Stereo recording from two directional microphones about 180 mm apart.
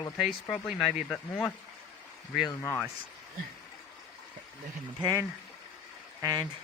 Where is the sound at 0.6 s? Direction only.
5° right (ahead or behind).